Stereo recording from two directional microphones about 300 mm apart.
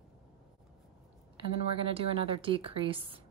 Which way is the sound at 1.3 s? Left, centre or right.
Centre.